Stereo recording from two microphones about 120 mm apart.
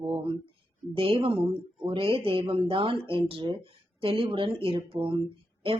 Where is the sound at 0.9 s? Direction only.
50° right (ahead or behind).